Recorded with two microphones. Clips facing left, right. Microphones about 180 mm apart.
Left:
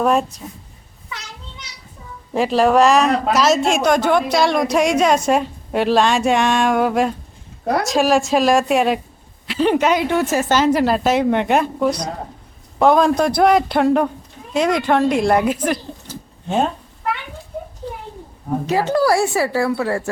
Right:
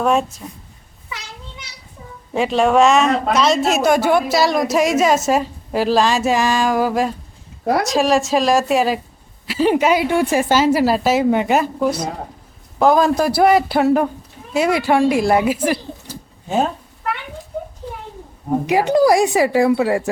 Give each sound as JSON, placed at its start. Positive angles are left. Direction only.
{"t": 0.0, "sound": "speech", "side_deg": 0}
{"t": 2.3, "sound": "a woman's voice", "side_deg": 0}
{"t": 18.6, "sound": "a woman's voice", "side_deg": -15}